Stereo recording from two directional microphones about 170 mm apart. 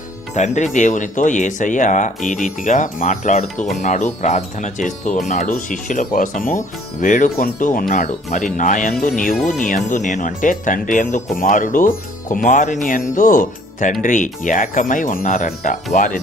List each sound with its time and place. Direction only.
0.3 s speech: 45° left (ahead or behind)